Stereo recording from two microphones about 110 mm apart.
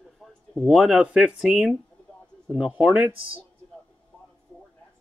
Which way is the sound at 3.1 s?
55° right (ahead or behind).